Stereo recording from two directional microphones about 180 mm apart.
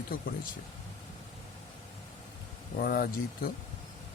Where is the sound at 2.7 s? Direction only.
55° left (ahead or behind).